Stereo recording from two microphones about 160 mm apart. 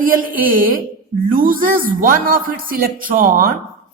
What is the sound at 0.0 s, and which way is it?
A woman's voice, 60° right (ahead or behind).